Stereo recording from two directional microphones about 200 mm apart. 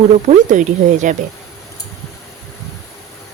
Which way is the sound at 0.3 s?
35° right (ahead or behind).